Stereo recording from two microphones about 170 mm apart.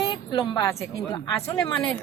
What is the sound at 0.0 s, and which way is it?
A woman's voice, 25° left (ahead or behind).